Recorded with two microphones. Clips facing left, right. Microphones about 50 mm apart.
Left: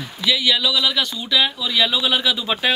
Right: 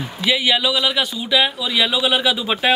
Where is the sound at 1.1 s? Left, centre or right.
Centre.